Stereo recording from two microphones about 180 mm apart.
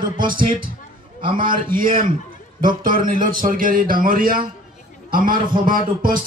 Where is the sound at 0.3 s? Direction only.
50° right (ahead or behind).